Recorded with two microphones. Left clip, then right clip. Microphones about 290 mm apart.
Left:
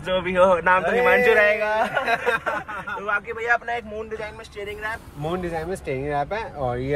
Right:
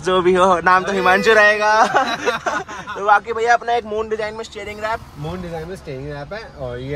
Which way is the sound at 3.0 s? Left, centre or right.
Centre.